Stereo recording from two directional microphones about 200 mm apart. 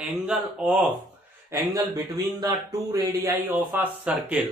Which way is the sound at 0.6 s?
5° right (ahead or behind).